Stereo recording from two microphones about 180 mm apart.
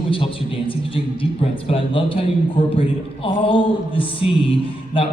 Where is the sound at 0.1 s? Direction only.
30° left (ahead or behind).